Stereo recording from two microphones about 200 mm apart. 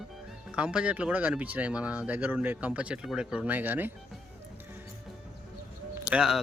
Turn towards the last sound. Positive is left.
turn(degrees=-5)  # may be behind; listen again after turning